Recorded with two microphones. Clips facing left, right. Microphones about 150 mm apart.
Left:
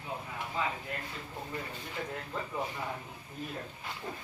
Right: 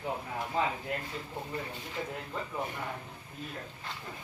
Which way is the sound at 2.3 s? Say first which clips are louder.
Even; centre (ahead or behind).